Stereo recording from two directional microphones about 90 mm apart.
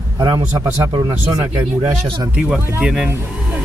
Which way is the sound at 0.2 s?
40° right (ahead or behind).